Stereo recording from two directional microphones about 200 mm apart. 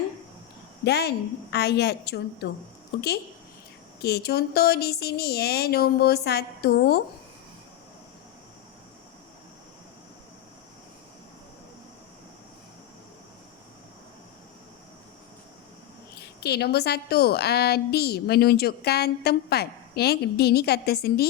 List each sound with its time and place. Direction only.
0.9 s a woman's voice: 55° left (ahead or behind)
4.0 s a woman's voice: 55° left (ahead or behind)
16.4 s a woman's voice: 55° left (ahead or behind)